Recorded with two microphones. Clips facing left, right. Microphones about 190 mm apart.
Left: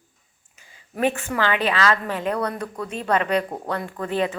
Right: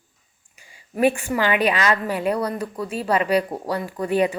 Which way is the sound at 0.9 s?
10° right (ahead or behind).